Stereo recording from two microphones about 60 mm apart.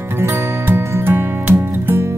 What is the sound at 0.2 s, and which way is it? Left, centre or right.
Music, right.